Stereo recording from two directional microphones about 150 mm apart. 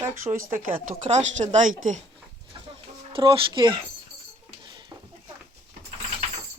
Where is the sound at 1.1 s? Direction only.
50° right (ahead or behind).